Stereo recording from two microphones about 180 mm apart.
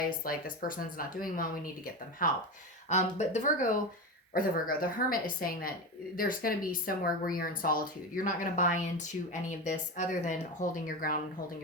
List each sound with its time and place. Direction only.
0.0 s speech: 50° left (ahead or behind)
4.4 s speech: 55° left (ahead or behind)